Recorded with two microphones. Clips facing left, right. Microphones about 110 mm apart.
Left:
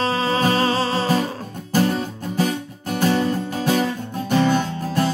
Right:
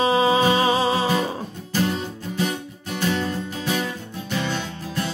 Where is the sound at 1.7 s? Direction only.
45° left (ahead or behind).